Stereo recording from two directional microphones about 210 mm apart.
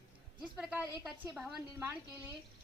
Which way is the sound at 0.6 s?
5° right (ahead or behind).